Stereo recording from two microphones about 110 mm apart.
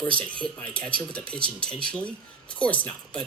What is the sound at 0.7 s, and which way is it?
Speech, 50° right (ahead or behind).